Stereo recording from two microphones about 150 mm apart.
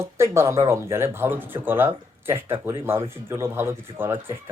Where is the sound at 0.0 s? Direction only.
20° right (ahead or behind).